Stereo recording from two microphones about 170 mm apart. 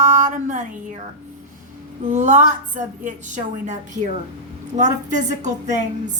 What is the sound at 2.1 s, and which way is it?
A woman's voice, 45° right (ahead or behind).